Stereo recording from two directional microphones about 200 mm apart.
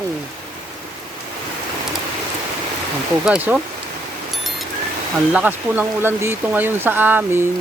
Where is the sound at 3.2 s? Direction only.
5° right (ahead or behind).